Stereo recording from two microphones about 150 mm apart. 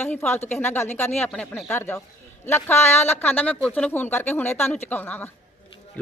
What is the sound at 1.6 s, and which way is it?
Speech, 15° left (ahead or behind).